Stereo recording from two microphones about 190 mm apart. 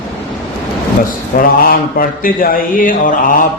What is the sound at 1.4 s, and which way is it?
Speech, 50° left (ahead or behind).